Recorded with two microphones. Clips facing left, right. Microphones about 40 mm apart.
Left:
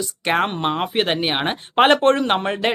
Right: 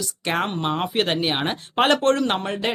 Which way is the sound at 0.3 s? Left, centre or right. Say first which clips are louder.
Left 4 dB; left.